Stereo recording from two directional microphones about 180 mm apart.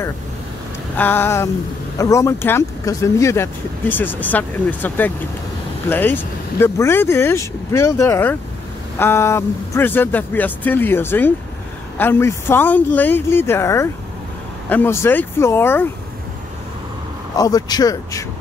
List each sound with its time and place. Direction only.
0.9 s speech: 10° left (ahead or behind)
17.4 s a man's voice: 20° left (ahead or behind)